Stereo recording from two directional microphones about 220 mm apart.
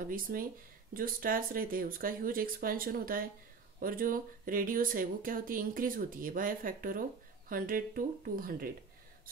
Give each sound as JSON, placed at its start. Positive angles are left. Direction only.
{"t": 0.1, "sound": "speech", "side_deg": -40}